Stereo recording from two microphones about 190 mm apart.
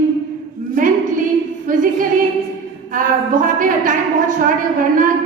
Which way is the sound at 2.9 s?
45° right (ahead or behind).